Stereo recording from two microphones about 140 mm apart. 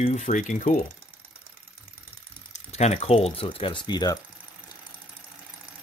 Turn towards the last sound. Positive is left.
turn(degrees=30)  # may be behind; listen again after turning